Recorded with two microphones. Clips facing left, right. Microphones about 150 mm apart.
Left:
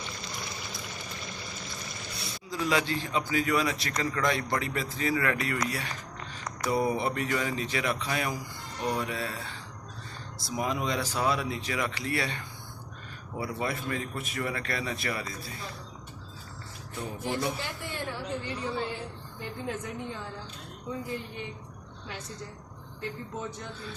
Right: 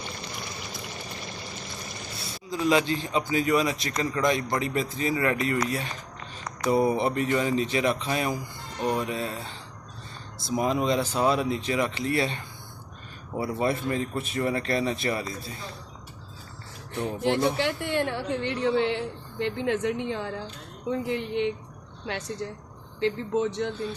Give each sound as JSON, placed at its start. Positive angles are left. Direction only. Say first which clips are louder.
{"t": 2.5, "sound": "a man's voice", "louder": "right 5 dB", "side_deg": -20}
{"t": 10.4, "sound": "a man's voice", "louder": "right 6 dB", "side_deg": -25}
{"t": 17.6, "sound": "a woman's voice", "louder": "right 10 dB", "side_deg": -70}